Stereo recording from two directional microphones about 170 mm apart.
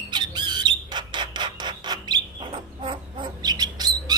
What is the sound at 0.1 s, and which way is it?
Squawk, 25° right (ahead or behind).